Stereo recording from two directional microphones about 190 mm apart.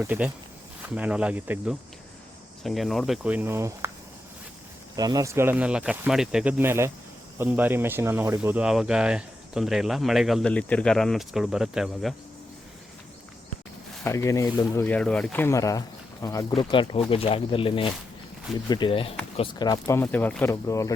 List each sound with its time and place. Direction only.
0.0 s speech: 10° right (ahead or behind)
4.9 s speech: 20° right (ahead or behind); by 12.1 s centre (ahead or behind)
14.0 s speech: 15° left (ahead or behind)
20.0 s speech: 10° left (ahead or behind)